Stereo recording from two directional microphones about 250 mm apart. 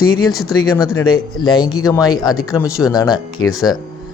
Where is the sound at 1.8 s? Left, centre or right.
Centre.